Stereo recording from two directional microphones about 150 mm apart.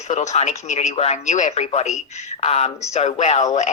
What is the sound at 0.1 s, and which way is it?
Speech, 50° left (ahead or behind).